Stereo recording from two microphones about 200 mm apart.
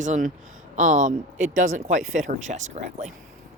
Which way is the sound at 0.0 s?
35° right (ahead or behind).